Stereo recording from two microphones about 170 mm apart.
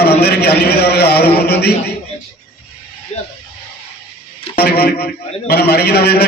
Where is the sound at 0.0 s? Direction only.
70° left (ahead or behind).